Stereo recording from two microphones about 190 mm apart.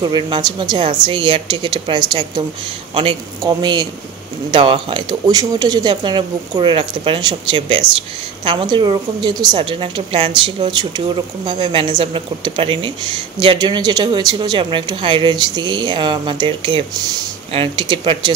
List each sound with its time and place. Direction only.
0.0 s a woman's voice: 25° right (ahead or behind)